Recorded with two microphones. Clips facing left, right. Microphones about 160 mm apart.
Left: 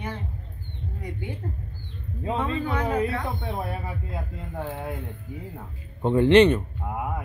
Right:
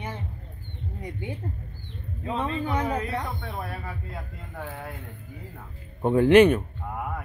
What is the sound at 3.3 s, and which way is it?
Speech, 20° left (ahead or behind).